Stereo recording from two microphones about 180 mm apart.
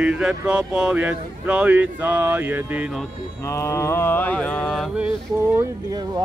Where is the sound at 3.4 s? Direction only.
15° left (ahead or behind).